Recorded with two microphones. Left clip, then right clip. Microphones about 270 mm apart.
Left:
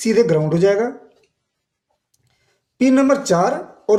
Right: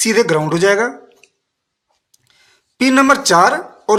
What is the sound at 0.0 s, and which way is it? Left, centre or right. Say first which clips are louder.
Speech: right 2 dB; centre.